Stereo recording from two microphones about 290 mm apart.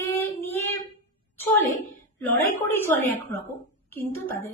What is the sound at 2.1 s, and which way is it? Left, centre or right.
Speech, centre.